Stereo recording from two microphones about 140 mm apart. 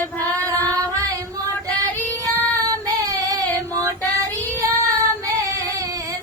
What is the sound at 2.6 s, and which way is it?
Child singing, 25° right (ahead or behind).